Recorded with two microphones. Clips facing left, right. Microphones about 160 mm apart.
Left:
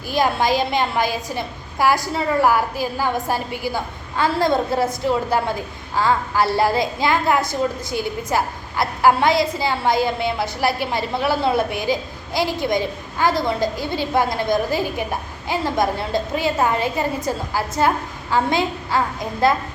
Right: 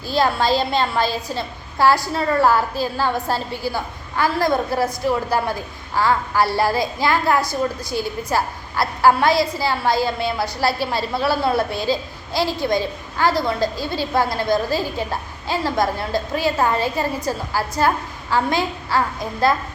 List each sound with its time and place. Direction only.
0.1 s a woman's voice: 15° left (ahead or behind)